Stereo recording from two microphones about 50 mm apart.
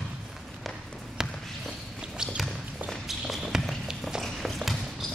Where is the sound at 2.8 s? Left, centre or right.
Centre.